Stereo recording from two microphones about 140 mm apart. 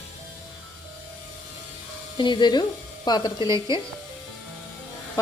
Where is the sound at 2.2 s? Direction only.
30° left (ahead or behind).